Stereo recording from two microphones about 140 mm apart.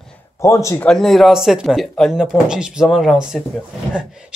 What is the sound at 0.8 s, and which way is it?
Speech, 5° left (ahead or behind).